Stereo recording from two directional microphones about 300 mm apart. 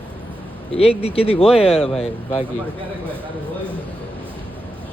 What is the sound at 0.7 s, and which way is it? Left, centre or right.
Speech, centre.